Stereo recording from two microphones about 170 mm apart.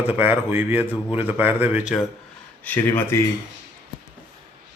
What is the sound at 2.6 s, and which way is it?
Speech, 15° left (ahead or behind).